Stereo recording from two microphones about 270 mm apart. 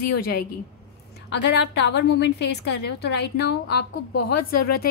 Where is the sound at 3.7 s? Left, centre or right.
Left.